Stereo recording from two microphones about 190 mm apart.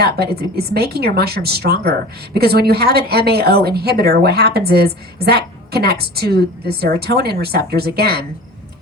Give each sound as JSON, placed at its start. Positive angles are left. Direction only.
{"t": 0.0, "sound": "a woman's voice", "side_deg": -55}